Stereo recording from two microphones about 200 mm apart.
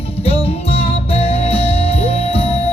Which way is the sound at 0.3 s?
30° left (ahead or behind).